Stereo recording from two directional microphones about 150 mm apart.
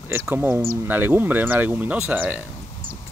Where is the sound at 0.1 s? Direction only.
15° right (ahead or behind).